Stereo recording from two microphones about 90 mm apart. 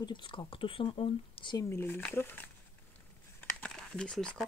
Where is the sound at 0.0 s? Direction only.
60° left (ahead or behind).